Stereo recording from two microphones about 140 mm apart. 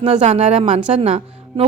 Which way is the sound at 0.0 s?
55° right (ahead or behind).